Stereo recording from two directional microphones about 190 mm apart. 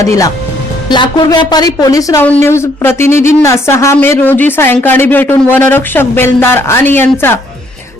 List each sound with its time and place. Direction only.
0.0 s a woman's voice: 15° left (ahead or behind)